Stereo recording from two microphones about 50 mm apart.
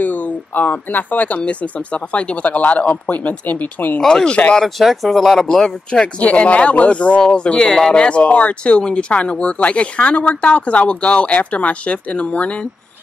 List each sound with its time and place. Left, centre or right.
0.0 s speech: left
4.0 s speech: centre
4.6 s speech: centre
5.5 s speech: centre